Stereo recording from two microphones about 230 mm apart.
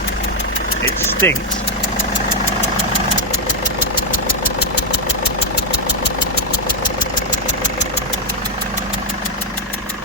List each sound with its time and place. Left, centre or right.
1.2 s speech: centre